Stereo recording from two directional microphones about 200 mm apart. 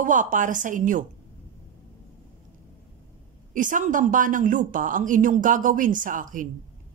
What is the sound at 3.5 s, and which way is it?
A woman's voice, 40° right (ahead or behind).